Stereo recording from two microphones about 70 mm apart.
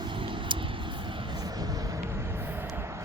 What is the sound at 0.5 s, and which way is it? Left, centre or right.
Vehicle, right.